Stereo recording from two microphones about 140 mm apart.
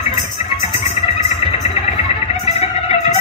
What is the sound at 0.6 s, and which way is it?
Music, 40° left (ahead or behind).